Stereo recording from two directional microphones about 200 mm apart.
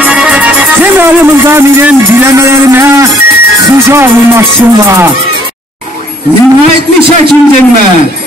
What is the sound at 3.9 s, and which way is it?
Speech, 15° right (ahead or behind).